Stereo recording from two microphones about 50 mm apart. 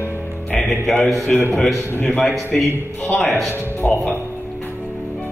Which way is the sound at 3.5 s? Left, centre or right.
Left.